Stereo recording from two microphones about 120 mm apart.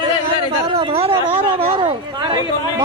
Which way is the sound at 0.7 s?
50° right (ahead or behind).